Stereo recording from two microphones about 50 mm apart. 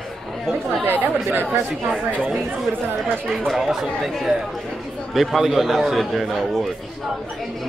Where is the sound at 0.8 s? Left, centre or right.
Right.